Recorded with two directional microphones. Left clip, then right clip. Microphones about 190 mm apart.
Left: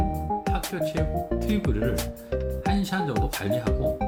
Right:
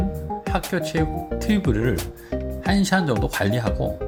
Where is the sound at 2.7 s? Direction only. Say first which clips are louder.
Right 7 dB; 45° right (ahead or behind).